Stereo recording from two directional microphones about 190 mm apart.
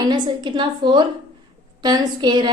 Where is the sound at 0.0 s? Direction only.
25° right (ahead or behind).